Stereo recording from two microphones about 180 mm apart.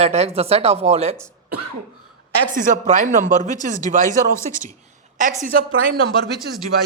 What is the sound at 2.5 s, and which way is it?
Speech, 45° right (ahead or behind).